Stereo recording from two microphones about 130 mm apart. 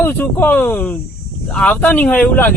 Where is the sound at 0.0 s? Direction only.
15° left (ahead or behind).